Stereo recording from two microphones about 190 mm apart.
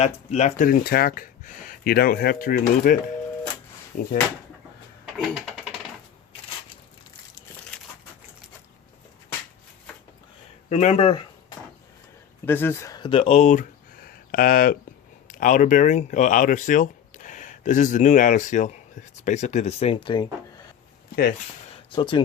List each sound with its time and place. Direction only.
0.0 s speech: 35° left (ahead or behind); by 4.1 s 50° left (ahead or behind)
5.1 s a sound: centre (ahead or behind)
10.7 s speech: 35° left (ahead or behind)
12.5 s speech: 10° left (ahead or behind)
21.9 s speech: 25° left (ahead or behind)